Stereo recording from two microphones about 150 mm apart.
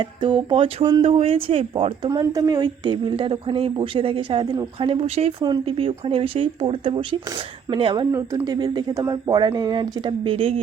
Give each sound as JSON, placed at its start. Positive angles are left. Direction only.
{"t": 0.0, "sound": "a woman's voice", "side_deg": -30}
{"t": 2.0, "sound": "a woman's voice", "side_deg": -25}
{"t": 5.4, "sound": "a woman's voice", "side_deg": -35}